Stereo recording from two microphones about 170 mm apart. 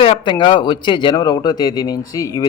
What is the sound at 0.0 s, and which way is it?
A man's voice, 30° left (ahead or behind).